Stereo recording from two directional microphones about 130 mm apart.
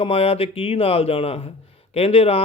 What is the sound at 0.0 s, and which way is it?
A man's voice, 45° left (ahead or behind).